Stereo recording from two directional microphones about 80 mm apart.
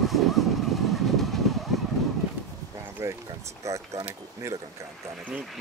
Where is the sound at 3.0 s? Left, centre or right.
Right.